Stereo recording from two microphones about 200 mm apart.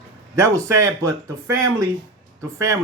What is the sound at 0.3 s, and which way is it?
A man's voice, 15° right (ahead or behind).